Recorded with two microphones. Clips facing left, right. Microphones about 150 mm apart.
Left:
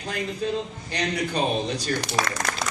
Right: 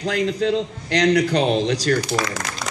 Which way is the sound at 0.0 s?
85° right.